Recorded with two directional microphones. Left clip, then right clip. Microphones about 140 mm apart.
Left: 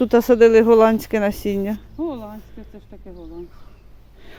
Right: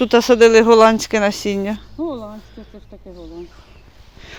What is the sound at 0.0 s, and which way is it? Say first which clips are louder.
Speech: right 2 dB; 55° left (ahead or behind).